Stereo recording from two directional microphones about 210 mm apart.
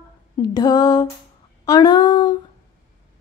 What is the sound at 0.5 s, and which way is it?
Speech, 20° left (ahead or behind).